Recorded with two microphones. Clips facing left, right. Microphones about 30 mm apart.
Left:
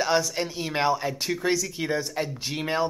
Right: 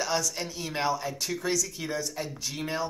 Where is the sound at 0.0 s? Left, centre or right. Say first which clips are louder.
Left 5 dB; left.